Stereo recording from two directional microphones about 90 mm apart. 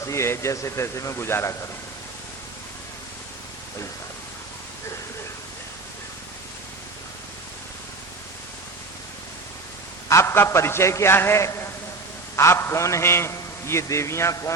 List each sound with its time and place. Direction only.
0.0 s a man's voice: 30° left (ahead or behind)
10.1 s a man's voice: 30° left (ahead or behind)